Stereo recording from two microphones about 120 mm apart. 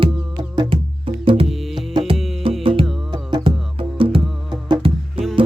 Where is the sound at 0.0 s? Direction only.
40° right (ahead or behind).